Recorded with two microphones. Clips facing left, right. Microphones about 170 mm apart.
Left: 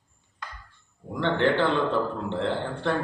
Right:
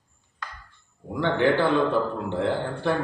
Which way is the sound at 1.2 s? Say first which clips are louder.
Right 2 dB; 10° right (ahead or behind).